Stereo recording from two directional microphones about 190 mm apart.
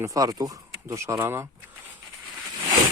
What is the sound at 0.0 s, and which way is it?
Speech, 15° right (ahead or behind).